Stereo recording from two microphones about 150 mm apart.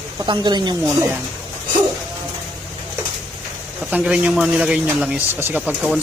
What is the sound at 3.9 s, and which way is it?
A man's voice, 10° right (ahead or behind).